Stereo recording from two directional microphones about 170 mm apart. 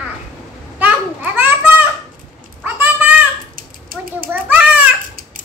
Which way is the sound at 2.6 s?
10° right (ahead or behind).